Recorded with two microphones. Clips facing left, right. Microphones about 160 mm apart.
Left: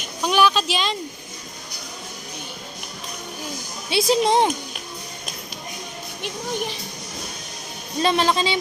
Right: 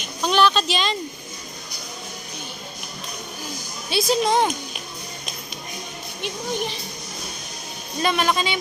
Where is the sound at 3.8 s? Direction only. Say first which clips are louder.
Left 2 dB; 25° left (ahead or behind).